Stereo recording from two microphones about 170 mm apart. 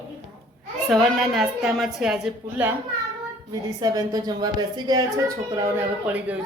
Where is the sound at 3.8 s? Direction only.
20° right (ahead or behind).